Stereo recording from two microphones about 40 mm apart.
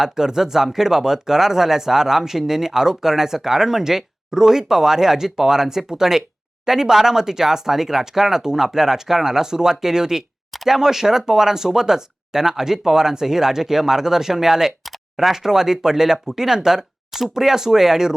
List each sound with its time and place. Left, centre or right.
0.0 s speech: centre
10.5 s a sound: centre
10.8 s speech: centre